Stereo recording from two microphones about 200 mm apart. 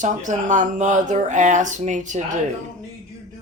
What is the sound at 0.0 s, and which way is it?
Speech, 40° right (ahead or behind).